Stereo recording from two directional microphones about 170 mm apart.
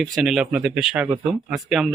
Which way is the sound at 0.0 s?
Centre (ahead or behind).